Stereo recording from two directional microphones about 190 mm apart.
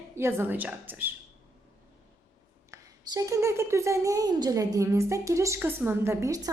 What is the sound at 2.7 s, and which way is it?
A woman's voice, 15° right (ahead or behind).